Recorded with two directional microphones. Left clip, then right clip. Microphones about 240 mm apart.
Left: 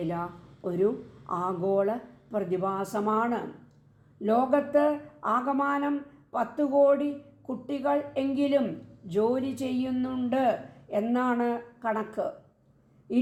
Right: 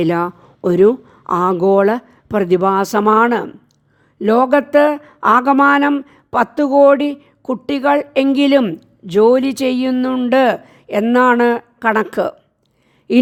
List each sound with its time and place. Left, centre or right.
0.0 s speech: right